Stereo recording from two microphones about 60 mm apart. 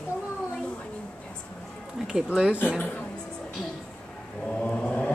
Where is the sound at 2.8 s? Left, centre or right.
Left.